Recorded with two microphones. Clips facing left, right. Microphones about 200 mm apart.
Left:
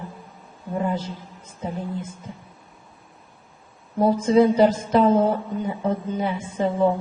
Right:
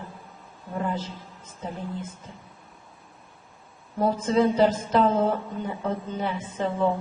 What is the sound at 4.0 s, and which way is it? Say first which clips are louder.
A woman's voice: left 5 dB; 15° left (ahead or behind).